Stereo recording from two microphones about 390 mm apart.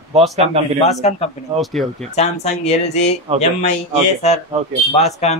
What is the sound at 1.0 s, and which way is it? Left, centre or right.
Speech, centre.